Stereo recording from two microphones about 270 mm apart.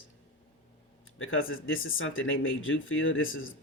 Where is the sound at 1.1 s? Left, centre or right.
Left.